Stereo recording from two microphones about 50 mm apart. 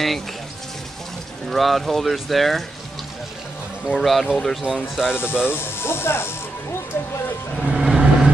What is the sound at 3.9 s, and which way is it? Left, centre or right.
Speech, centre.